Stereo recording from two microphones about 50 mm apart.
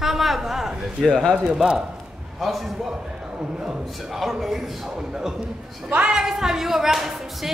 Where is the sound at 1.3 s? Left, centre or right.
Right.